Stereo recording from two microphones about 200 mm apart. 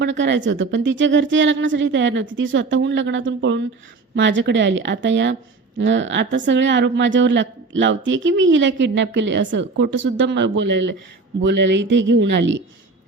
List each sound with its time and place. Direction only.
0.0 s a woman's voice: 65° right (ahead or behind)